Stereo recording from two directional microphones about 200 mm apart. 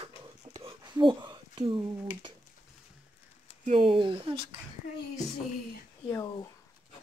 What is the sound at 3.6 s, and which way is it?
Speech, 30° right (ahead or behind).